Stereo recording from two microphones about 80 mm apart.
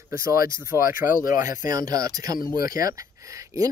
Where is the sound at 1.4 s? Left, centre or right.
Right.